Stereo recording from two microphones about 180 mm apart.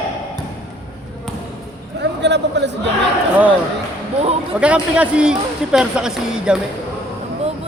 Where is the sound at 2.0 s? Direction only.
75° right (ahead or behind).